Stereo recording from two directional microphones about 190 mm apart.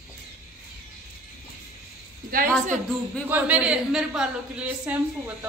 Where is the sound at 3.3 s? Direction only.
5° right (ahead or behind).